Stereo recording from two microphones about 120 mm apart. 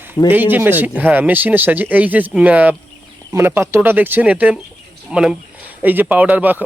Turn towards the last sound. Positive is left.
turn(degrees=-15)  # may be behind; listen again after turning